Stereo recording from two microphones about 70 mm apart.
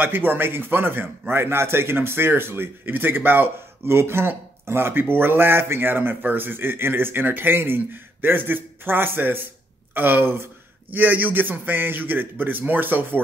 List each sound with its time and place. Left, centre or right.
0.0 s a man's voice: right